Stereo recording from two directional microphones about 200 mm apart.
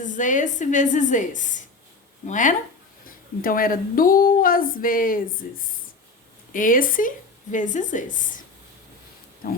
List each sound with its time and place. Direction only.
0.0 s a woman's voice: 40° left (ahead or behind)
6.5 s a woman's voice: 40° left (ahead or behind)